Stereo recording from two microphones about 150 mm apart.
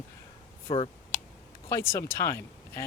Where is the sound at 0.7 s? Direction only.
35° left (ahead or behind).